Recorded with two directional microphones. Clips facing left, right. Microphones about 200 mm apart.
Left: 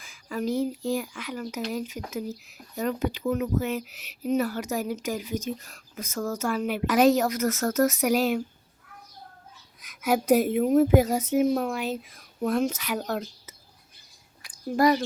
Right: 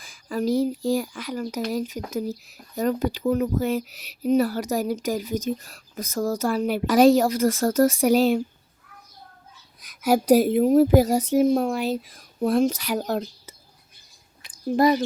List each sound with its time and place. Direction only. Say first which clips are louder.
0.0 s speech: right 4 dB; 35° right (ahead or behind)
9.8 s speech: right 4 dB; 35° right (ahead or behind)
14.4 s a sound: right 2 dB; 25° right (ahead or behind)